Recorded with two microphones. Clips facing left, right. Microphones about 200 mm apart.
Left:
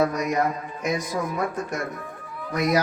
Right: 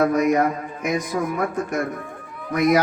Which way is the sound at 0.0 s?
55° right (ahead or behind).